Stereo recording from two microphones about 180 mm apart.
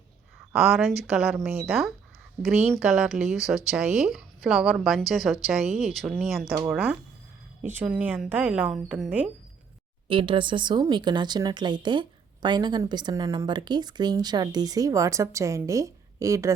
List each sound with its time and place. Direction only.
0.5 s speech: 5° right (ahead or behind)
10.1 s a woman's voice: 30° right (ahead or behind)